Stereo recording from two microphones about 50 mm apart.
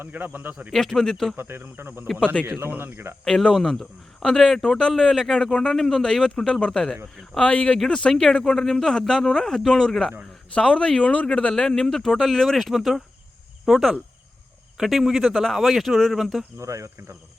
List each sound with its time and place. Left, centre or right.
0.0 s speech: right
0.7 s speech: centre
1.4 s speech: right
2.2 s speech: left
2.6 s speech: right
3.2 s speech: centre
3.5 s speech: centre
7.4 s speech: left
11.5 s speech: centre
16.6 s speech: right